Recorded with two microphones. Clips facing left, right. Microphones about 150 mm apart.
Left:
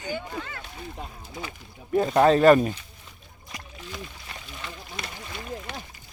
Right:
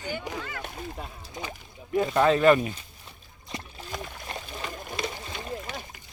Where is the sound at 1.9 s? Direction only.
35° left (ahead or behind).